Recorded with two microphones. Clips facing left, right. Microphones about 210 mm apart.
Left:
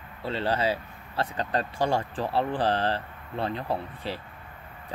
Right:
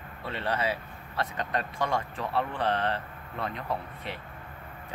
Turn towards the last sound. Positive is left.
turn(degrees=30)  # may be behind; listen again after turning